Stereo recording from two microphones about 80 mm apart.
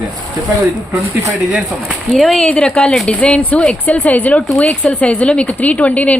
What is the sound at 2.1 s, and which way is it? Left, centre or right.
Speech, centre.